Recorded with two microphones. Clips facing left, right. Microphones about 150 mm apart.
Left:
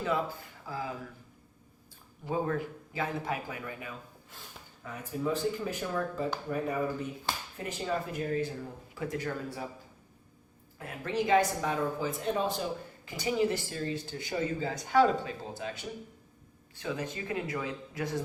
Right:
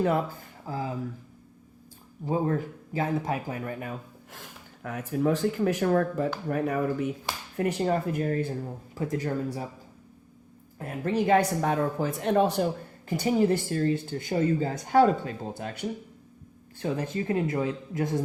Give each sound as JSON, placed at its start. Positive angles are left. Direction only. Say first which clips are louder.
{"t": 0.6, "sound": "speech", "louder": "right 5 dB", "side_deg": -35}
{"t": 2.2, "sound": "speech", "louder": "right 4 dB", "side_deg": -35}
{"t": 4.3, "sound": "speech", "louder": "right 4 dB", "side_deg": -75}
{"t": 7.9, "sound": "speech", "louder": "right 6 dB", "side_deg": -50}
{"t": 10.8, "sound": "speech", "louder": "right 5 dB", "side_deg": -45}
{"t": 13.1, "sound": "speech", "louder": "right 6 dB", "side_deg": -50}
{"t": 16.8, "sound": "speech", "louder": "right 6 dB", "side_deg": -40}